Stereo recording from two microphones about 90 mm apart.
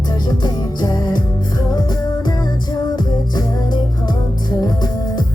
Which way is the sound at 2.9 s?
55° left (ahead or behind).